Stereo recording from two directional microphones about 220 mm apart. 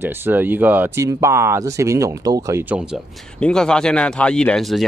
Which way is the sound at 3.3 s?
5° left (ahead or behind).